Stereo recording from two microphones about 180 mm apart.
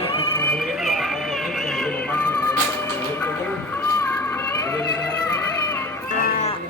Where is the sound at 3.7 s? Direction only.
10° left (ahead or behind).